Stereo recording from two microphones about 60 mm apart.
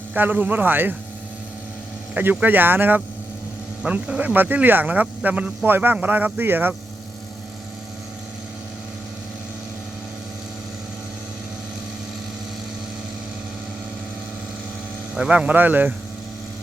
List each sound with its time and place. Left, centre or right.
0.1 s speech: right
2.4 s speech: right
3.8 s speech: centre
4.4 s speech: right
15.3 s speech: right